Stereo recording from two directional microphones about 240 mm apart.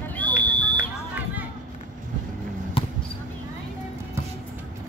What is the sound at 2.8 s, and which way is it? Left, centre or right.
Basketball bounce, left.